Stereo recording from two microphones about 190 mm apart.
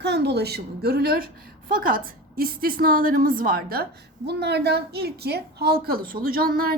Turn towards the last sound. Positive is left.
turn(degrees=-50)  # may be behind; listen again after turning